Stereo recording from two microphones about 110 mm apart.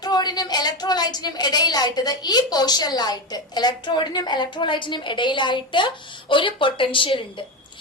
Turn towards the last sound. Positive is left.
turn(degrees=50)  # may be behind; listen again after turning